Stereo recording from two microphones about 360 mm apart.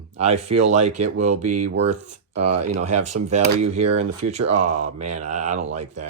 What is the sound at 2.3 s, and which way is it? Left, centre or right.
Speech, right.